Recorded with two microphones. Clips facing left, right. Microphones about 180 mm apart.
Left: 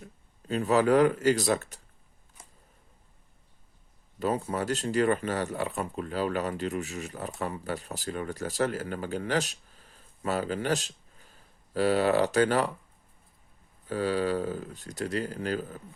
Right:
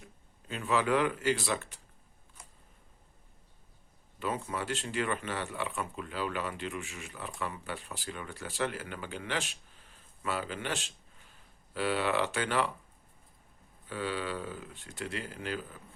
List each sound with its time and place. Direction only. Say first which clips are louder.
0.0 s speech: left 6 dB; 40° left (ahead or behind)
4.2 s speech: left 6 dB; 40° left (ahead or behind)
13.8 s speech: left 8 dB; 40° left (ahead or behind)